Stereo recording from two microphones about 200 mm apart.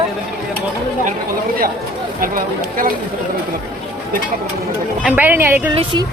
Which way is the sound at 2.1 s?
45° right (ahead or behind).